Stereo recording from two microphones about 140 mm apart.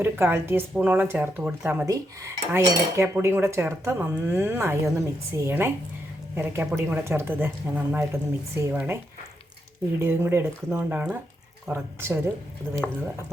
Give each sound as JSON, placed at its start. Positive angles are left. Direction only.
{"t": 0.0, "sound": "cutlery", "side_deg": -15}
{"t": 1.9, "sound": "cutlery", "side_deg": -20}
{"t": 10.0, "sound": "cutlery", "side_deg": -15}